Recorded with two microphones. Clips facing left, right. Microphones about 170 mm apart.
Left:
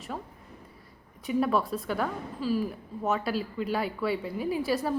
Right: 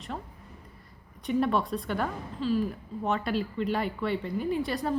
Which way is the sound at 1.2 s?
5° left (ahead or behind).